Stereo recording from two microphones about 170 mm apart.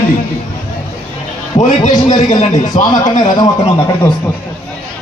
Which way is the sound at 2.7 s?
25° left (ahead or behind).